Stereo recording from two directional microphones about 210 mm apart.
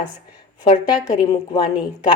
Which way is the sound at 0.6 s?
20° left (ahead or behind).